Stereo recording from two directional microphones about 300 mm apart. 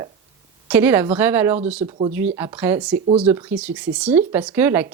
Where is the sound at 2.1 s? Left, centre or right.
Centre.